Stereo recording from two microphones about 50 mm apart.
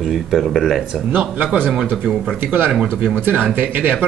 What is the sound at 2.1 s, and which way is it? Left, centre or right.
Speech, centre.